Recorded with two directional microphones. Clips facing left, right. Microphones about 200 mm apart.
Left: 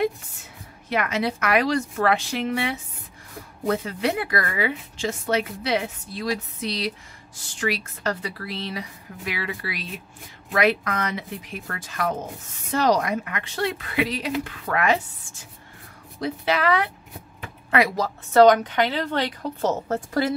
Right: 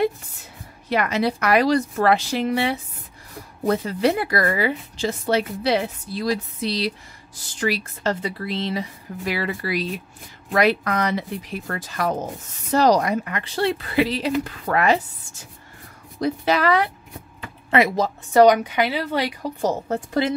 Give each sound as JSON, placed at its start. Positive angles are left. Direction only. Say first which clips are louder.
{"t": 0.8, "sound": "speech", "louder": "right 3 dB", "side_deg": -35}
{"t": 9.2, "sound": "speech", "louder": "right 5 dB", "side_deg": -40}
{"t": 16.2, "sound": "speech", "louder": "right 3 dB", "side_deg": -40}
{"t": 17.6, "sound": "speech", "louder": "right 3 dB", "side_deg": -20}